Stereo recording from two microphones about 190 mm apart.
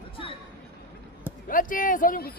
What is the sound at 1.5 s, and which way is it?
Speech, 45° left (ahead or behind).